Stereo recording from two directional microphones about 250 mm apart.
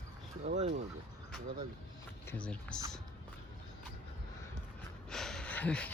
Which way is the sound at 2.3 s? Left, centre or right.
Centre.